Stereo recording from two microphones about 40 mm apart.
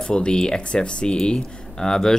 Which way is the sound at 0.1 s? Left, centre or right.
Left.